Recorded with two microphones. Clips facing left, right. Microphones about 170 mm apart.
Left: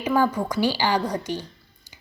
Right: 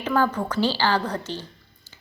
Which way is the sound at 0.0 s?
10° left (ahead or behind).